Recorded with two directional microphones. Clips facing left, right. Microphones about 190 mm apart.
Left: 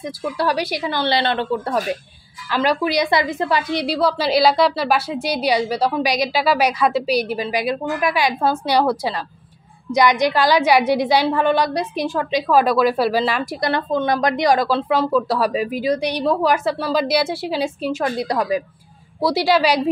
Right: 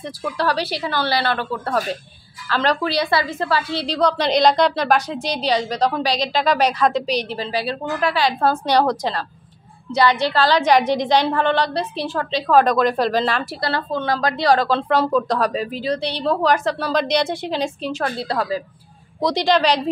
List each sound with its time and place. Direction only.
0.4 s a woman's voice: 10° left (ahead or behind)